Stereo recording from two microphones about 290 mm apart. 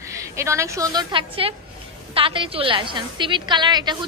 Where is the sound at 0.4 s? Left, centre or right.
Centre.